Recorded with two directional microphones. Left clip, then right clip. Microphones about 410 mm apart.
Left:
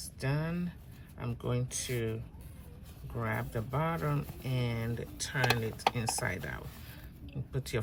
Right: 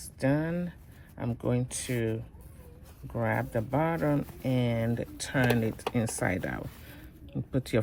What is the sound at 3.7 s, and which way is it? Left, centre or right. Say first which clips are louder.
Speech: right 6 dB; centre.